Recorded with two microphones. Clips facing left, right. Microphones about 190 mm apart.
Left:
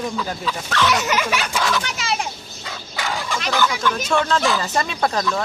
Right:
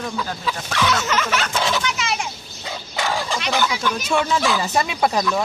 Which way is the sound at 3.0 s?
30° right (ahead or behind).